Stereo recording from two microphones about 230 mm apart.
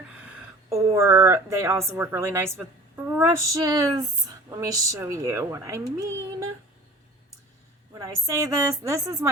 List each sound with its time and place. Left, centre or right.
0.7 s a woman's voice: centre
8.6 s a woman's voice: centre